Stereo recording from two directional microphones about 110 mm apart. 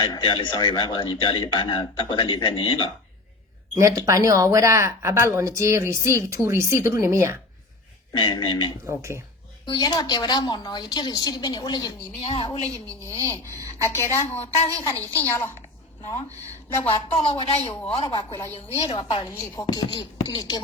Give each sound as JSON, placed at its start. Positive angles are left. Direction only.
{"t": 0.0, "sound": "a man's voice", "side_deg": 40}
{"t": 3.8, "sound": "speech", "side_deg": -30}
{"t": 8.1, "sound": "a man's voice", "side_deg": 45}
{"t": 8.9, "sound": "speech", "side_deg": -25}
{"t": 9.6, "sound": "a woman's voice", "side_deg": 40}
{"t": 12.2, "sound": "speech", "side_deg": 55}
{"t": 12.5, "sound": "a woman's voice", "side_deg": 75}
{"t": 13.2, "sound": "a woman's voice", "side_deg": 25}
{"t": 16.8, "sound": "speech", "side_deg": 65}
{"t": 18.1, "sound": "a man's voice", "side_deg": 45}